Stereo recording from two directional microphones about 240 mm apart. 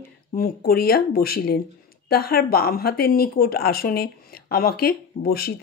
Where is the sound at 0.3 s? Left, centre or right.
Left.